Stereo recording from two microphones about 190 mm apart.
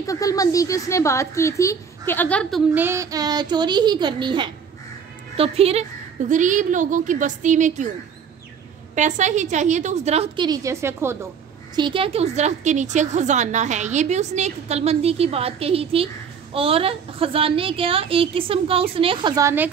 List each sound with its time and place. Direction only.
0.0 s a woman's voice: 15° left (ahead or behind)
2.7 s a woman's voice: 10° right (ahead or behind); by 7.9 s 40° right (ahead or behind)
8.9 s a woman's voice: 40° right (ahead or behind); by 11.1 s 15° right (ahead or behind)
11.7 s a woman's voice: 25° right (ahead or behind)